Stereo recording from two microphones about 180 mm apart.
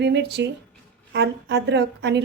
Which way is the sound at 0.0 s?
65° right (ahead or behind).